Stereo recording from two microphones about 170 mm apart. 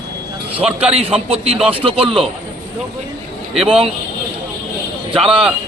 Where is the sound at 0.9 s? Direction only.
35° right (ahead or behind).